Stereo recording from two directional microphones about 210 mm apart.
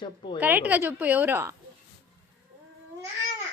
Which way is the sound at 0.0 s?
25° left (ahead or behind).